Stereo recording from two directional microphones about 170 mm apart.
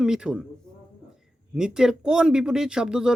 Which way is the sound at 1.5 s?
5° right (ahead or behind).